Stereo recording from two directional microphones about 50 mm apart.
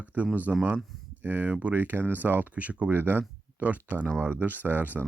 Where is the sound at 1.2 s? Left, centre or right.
Right.